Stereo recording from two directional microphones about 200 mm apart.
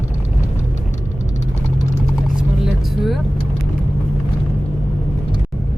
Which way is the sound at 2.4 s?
Centre (ahead or behind).